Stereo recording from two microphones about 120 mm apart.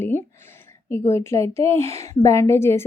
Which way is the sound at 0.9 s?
20° left (ahead or behind).